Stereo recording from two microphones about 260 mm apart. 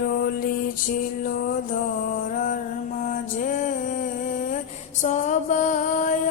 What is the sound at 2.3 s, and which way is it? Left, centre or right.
Mantra, left.